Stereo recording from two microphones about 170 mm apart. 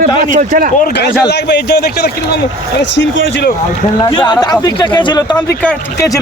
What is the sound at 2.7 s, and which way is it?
Speech, 90° left.